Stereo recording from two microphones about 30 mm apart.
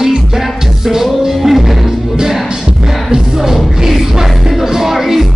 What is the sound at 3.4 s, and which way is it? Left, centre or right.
Music, centre.